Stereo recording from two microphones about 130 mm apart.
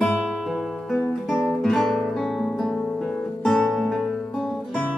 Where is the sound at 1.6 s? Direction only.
Centre (ahead or behind).